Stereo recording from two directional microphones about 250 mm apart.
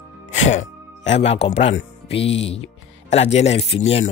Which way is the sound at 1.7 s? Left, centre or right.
Left.